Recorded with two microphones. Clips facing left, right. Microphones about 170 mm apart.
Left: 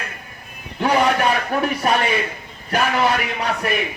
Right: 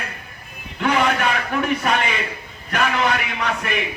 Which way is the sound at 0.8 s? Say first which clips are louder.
Left 2 dB; 35° left (ahead or behind).